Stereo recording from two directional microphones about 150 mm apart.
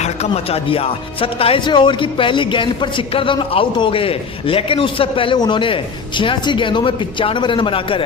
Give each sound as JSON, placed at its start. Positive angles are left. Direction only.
{"t": 0.0, "sound": "speech", "side_deg": 45}